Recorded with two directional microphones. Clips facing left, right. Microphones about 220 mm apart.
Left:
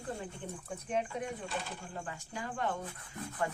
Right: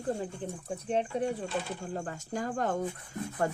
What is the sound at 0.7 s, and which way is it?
Speech, 30° right (ahead or behind).